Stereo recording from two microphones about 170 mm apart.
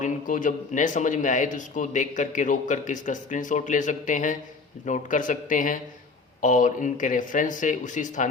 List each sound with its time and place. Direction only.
0.0 s speech: 50° left (ahead or behind)